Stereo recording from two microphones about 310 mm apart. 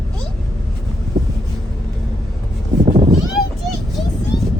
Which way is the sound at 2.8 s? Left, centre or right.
Centre.